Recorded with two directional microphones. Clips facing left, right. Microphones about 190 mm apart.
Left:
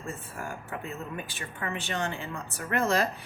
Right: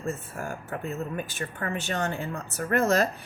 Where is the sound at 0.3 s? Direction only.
45° right (ahead or behind).